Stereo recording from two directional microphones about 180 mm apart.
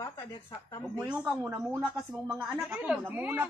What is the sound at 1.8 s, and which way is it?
A woman's voice, centre (ahead or behind).